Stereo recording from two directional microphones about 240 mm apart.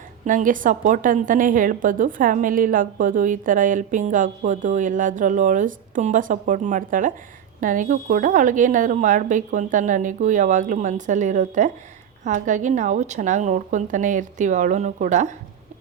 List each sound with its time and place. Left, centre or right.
0.3 s a woman's voice: right